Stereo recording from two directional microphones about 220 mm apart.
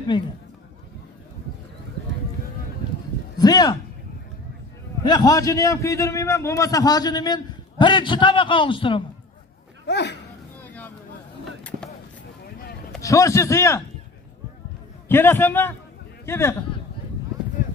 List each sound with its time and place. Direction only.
0.1 s a man's voice: 20° left (ahead or behind)
3.3 s speech: 15° left (ahead or behind)
5.0 s a man's voice: 20° left (ahead or behind)
9.8 s speech: 50° left (ahead or behind)
10.6 s vehicle: 5° left (ahead or behind)
11.7 s a sound: 40° right (ahead or behind)
13.0 s a man's voice: 15° left (ahead or behind)
15.0 s a man's voice: 10° left (ahead or behind)